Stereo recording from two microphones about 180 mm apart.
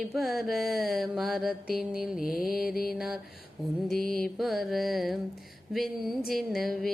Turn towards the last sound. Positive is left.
turn(degrees=0)  # may be behind; listen again after turning